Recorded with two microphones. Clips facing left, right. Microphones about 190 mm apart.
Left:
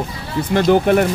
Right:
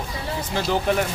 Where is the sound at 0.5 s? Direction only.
60° left (ahead or behind).